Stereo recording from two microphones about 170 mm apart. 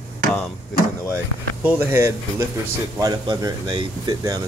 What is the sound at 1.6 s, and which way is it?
Speech, 15° right (ahead or behind).